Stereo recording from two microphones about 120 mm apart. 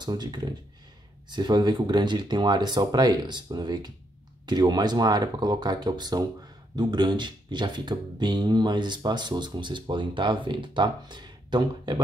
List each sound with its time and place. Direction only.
0.0 s speech: 35° right (ahead or behind)